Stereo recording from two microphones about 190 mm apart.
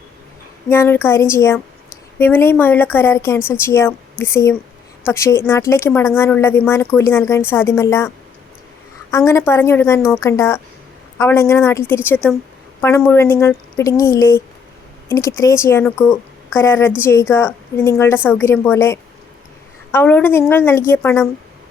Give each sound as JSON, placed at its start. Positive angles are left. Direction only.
{"t": 0.7, "sound": "a woman's voice", "side_deg": 10}